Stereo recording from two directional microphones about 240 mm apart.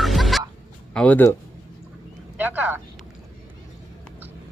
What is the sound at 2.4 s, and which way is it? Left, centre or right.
Speech, centre.